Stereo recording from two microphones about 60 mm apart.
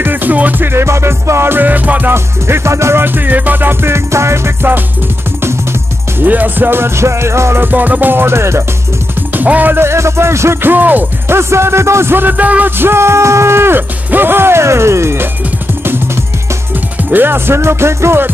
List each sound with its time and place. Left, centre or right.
0.0 s music: right
1.5 s music: right
2.1 s music: right
3.0 s music: right
4.6 s music: right
6.1 s music: right
7.6 s music: right
9.3 s speech: right
9.8 s music: right
10.6 s music: right
11.2 s music: right
12.7 s music: right
17.1 s music: right